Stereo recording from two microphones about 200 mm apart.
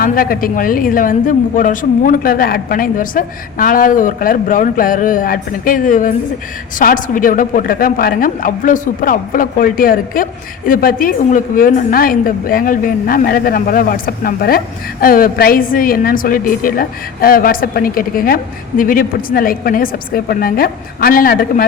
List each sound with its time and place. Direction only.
0.0 s a woman's voice: 45° left (ahead or behind)